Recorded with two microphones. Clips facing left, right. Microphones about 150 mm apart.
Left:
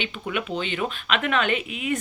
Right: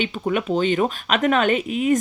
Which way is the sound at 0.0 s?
40° right (ahead or behind).